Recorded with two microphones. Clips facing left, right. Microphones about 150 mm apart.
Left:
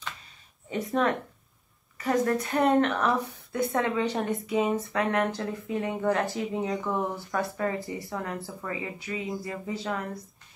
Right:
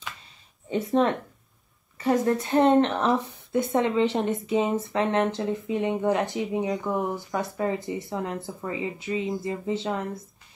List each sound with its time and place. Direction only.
2.0 s a woman's voice: 25° right (ahead or behind)